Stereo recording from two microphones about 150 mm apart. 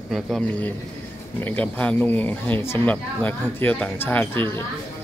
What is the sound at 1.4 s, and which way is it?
Speech, 10° left (ahead or behind).